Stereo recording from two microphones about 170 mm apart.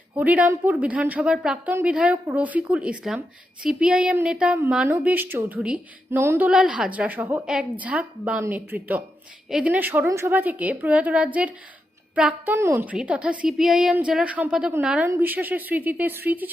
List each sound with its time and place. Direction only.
0.1 s a woman's voice: 10° right (ahead or behind)